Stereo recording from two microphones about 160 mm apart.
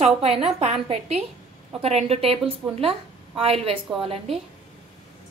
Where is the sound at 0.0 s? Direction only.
40° right (ahead or behind).